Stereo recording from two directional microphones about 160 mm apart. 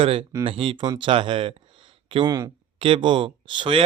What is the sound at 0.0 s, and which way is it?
Speech, 35° right (ahead or behind).